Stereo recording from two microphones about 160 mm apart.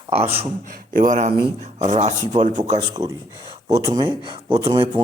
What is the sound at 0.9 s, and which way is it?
Speech, 55° right (ahead or behind).